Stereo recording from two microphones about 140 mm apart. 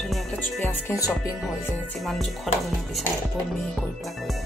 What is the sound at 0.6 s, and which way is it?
Speech, 15° left (ahead or behind).